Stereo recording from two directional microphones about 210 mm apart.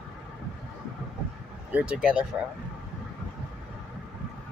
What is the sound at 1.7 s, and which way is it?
Speech, 5° right (ahead or behind).